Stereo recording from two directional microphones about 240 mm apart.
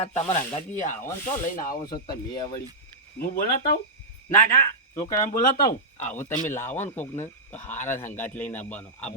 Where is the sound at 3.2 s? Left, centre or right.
Left.